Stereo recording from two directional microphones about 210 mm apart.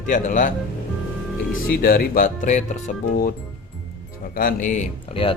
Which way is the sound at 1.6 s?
45° left (ahead or behind).